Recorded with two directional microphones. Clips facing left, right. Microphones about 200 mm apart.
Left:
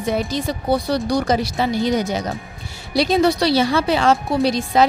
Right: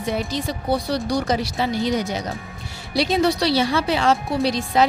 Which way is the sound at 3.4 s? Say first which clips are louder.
Left 3 dB; 45° left (ahead or behind).